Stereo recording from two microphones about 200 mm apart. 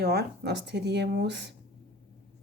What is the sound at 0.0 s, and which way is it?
Speech, 50° right (ahead or behind).